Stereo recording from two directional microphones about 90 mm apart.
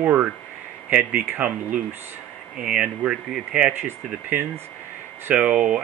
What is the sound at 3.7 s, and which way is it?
Speech, 20° right (ahead or behind).